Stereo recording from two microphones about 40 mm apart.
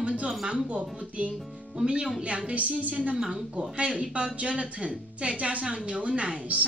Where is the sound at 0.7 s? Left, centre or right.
Right.